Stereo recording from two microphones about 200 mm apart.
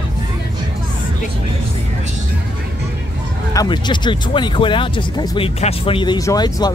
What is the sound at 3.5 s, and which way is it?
Speech, 20° left (ahead or behind).